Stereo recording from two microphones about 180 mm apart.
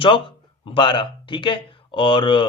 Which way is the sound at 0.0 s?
25° left (ahead or behind).